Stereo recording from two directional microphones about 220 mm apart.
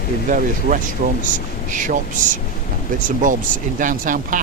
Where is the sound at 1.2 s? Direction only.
35° right (ahead or behind).